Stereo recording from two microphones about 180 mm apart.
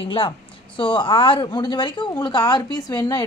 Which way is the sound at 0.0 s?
30° left (ahead or behind).